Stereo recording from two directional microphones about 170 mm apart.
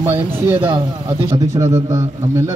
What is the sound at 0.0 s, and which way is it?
A man's voice, 10° right (ahead or behind).